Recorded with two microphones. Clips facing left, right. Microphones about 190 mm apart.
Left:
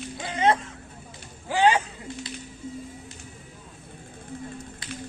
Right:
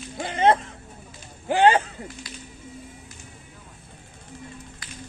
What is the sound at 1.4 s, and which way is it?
Speech, 55° right (ahead or behind).